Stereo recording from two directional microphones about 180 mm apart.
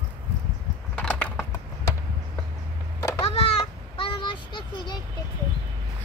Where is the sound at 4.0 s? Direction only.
25° left (ahead or behind).